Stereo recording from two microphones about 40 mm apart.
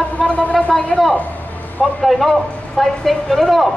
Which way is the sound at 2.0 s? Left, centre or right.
Centre.